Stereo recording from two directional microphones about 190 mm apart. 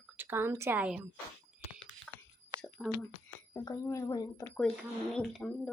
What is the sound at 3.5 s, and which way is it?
Speech, 15° left (ahead or behind).